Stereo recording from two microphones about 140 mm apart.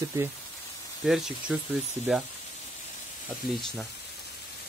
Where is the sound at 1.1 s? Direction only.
Centre (ahead or behind).